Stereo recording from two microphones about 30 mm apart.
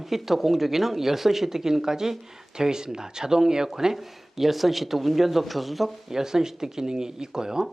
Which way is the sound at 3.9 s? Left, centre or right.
Centre.